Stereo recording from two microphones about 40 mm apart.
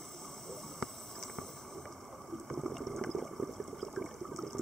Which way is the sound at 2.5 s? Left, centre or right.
Centre.